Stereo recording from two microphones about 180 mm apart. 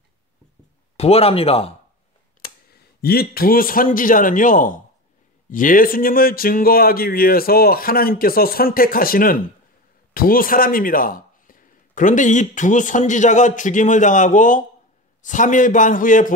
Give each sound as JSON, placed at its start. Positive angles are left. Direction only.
{"t": 0.9, "sound": "speech", "side_deg": 35}
{"t": 2.7, "sound": "speech", "side_deg": 60}